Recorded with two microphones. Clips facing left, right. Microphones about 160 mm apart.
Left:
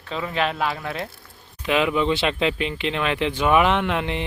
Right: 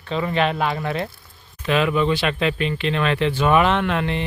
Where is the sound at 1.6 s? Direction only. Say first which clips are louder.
Right 1 dB; 15° left (ahead or behind).